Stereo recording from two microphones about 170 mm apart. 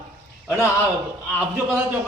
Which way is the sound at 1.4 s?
5° right (ahead or behind).